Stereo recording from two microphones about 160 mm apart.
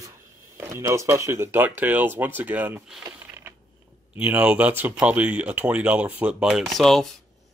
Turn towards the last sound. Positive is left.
turn(degrees=0)  # may be behind; listen again after turning